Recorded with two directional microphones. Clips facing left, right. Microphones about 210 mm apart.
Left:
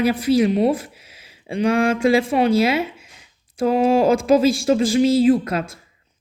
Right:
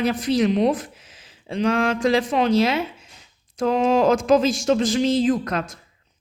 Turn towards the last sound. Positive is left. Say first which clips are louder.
# left 5 dB
turn(degrees=5)  # may be behind; listen again after turning